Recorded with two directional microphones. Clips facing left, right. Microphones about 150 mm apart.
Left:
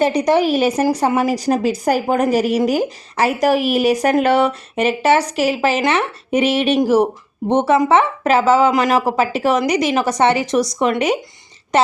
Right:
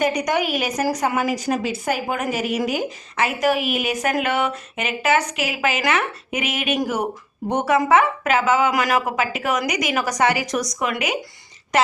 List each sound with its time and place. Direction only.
0.0 s a woman's voice: 30° left (ahead or behind)